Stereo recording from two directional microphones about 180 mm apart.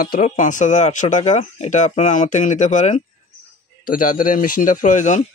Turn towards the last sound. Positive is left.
turn(degrees=45)  # may be behind; listen again after turning